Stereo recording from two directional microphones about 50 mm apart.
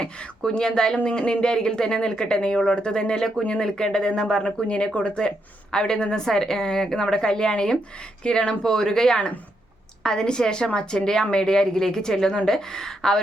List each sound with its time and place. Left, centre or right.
0.0 s speech: centre